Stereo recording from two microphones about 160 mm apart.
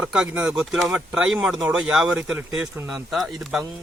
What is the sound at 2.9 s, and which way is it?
Speech, centre (ahead or behind).